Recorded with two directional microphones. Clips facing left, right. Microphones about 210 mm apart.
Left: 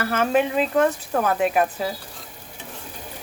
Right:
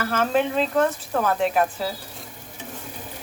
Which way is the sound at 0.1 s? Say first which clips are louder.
Left 1 dB; 15° left (ahead or behind).